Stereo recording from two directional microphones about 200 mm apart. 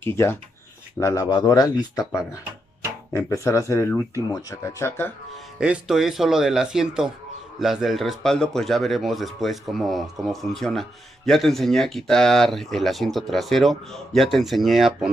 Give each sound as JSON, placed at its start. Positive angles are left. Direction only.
{"t": 0.0, "sound": "speech", "side_deg": 10}
{"t": 5.6, "sound": "a man's voice", "side_deg": -5}